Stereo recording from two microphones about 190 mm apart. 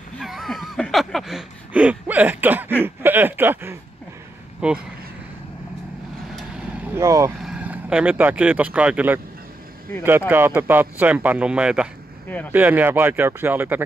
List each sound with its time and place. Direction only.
0.2 s a sound: centre (ahead or behind)
4.6 s speech: 5° right (ahead or behind)
7.0 s speech: 15° right (ahead or behind)